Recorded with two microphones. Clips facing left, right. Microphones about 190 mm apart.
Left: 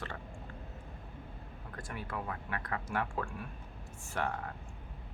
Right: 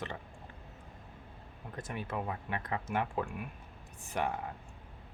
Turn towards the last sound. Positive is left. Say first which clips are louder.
# right 2 dB
turn(degrees=-15)  # may be behind; listen again after turning